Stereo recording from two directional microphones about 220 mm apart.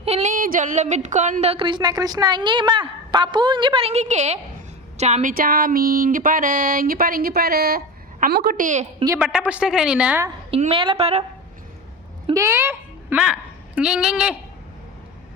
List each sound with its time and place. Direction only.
0.0 s speech: 30° right (ahead or behind)
4.9 s a sound: 30° right (ahead or behind)
9.2 s a woman's voice: 5° right (ahead or behind)
10.6 s speech: 25° right (ahead or behind)
12.3 s a woman's voice: 15° right (ahead or behind)